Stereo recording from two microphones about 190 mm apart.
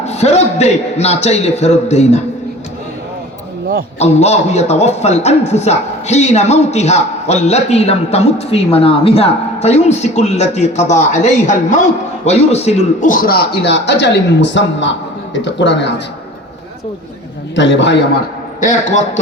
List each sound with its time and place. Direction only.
0.0 s a man's voice: 35° left (ahead or behind)
4.0 s a man's voice: 35° left (ahead or behind); by 16.0 s 65° left (ahead or behind)
17.5 s a man's voice: 70° left (ahead or behind)
18.6 s a man's voice: 40° left (ahead or behind)